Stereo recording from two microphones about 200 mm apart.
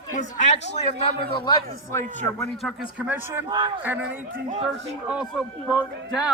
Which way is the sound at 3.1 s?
10° right (ahead or behind).